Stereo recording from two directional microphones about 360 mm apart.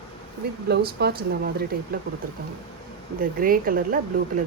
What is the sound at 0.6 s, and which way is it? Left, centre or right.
Speech, right.